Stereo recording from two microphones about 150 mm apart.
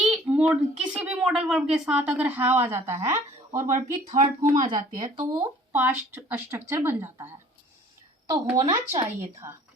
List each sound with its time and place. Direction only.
0.0 s a sound: 5° right (ahead or behind)
0.8 s a woman's voice: 10° right (ahead or behind)
3.7 s speech: 60° right (ahead or behind)
4.4 s speech: 35° right (ahead or behind)
5.7 s a woman's voice: 15° right (ahead or behind)
8.5 s speech: 30° right (ahead or behind)